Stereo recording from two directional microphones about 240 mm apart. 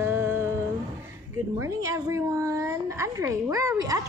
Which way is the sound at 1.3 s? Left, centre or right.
Centre.